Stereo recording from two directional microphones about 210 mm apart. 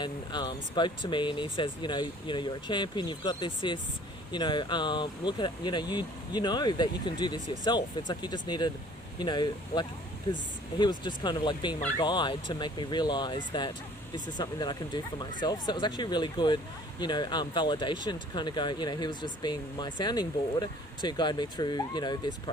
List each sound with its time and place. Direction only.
0.0 s speech: 20° left (ahead or behind)